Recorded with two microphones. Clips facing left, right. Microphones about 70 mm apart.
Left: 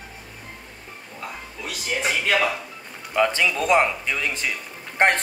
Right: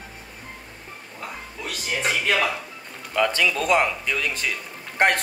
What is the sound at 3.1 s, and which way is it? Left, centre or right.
Speech, centre.